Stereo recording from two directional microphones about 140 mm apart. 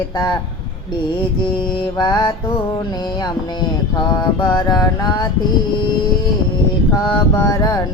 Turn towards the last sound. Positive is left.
turn(degrees=25)  # may be behind; listen again after turning